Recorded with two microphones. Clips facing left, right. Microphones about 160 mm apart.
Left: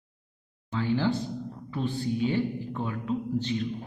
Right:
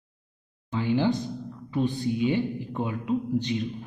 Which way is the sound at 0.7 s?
15° right (ahead or behind).